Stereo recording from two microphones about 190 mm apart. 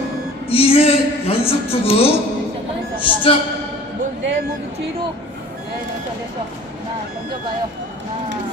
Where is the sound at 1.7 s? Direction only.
30° left (ahead or behind).